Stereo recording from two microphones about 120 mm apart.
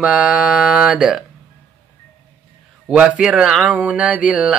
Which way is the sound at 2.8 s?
5° right (ahead or behind).